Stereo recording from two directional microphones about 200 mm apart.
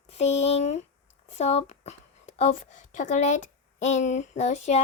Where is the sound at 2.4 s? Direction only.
40° left (ahead or behind).